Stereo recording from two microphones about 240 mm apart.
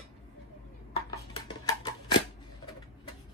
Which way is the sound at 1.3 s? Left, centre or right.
Centre.